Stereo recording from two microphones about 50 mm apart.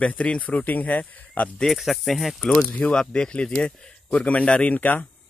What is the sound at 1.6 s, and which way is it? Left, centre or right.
Speech, centre.